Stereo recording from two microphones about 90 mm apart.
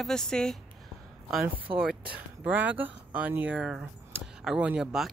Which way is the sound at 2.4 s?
15° right (ahead or behind).